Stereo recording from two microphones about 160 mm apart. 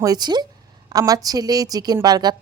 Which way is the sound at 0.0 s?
25° right (ahead or behind).